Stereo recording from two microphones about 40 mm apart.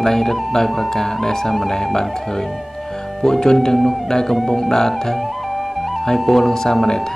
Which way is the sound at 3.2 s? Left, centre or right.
Centre.